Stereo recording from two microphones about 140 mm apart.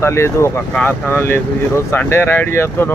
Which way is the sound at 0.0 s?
20° left (ahead or behind).